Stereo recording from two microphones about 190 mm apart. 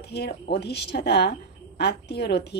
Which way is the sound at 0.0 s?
60° left (ahead or behind).